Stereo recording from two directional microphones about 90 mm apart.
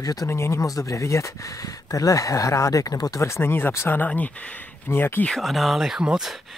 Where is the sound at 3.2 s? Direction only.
30° left (ahead or behind).